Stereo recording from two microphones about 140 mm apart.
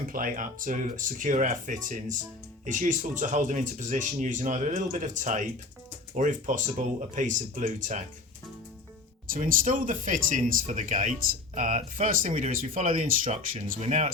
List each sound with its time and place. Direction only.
0.1 s speech: 80° right; by 8.0 s 60° right (ahead or behind)
9.3 s speech: 75° right (ahead or behind)
13.7 s speech: 55° right (ahead or behind)